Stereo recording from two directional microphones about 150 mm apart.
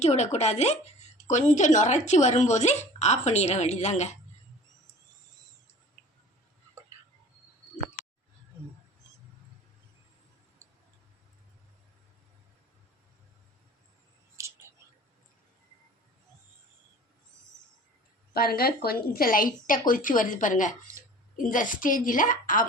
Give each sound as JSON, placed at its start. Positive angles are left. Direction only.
{"t": 0.0, "sound": "speech", "side_deg": 50}
{"t": 18.3, "sound": "a woman's voice", "side_deg": 90}